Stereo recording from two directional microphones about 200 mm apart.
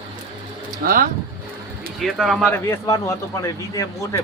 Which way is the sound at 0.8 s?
50° right (ahead or behind).